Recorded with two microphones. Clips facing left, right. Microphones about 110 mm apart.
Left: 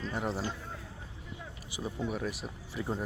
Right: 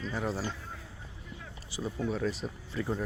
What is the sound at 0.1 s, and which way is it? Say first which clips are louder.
Speech: right 1 dB; 20° left (ahead or behind).